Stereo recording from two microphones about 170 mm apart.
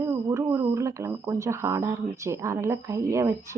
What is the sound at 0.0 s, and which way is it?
A woman's voice, 15° right (ahead or behind).